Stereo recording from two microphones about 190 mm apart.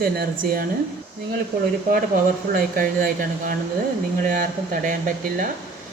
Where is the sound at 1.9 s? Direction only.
50° right (ahead or behind).